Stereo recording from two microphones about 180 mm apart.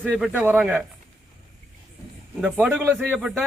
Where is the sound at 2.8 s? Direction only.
10° right (ahead or behind).